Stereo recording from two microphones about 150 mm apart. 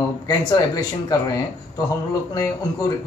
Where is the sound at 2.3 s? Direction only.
25° left (ahead or behind).